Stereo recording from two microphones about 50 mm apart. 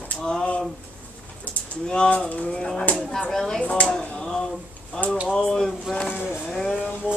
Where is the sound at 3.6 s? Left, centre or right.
Left.